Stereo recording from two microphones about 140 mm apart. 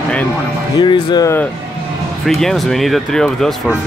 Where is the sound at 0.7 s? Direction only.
30° left (ahead or behind).